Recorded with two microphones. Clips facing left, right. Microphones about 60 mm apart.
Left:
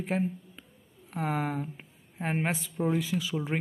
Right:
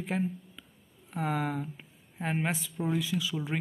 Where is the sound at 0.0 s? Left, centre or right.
Left.